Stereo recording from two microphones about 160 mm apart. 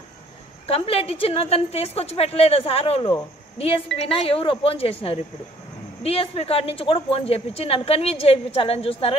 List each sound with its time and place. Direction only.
0.7 s a woman's voice: 40° left (ahead or behind)